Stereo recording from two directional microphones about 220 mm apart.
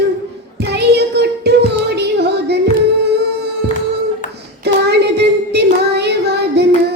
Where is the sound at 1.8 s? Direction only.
50° right (ahead or behind).